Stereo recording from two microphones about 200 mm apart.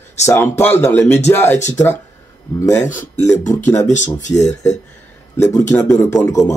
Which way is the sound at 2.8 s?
40° left (ahead or behind).